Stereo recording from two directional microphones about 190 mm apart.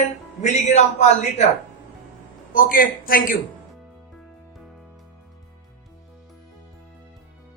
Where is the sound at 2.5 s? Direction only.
45° left (ahead or behind).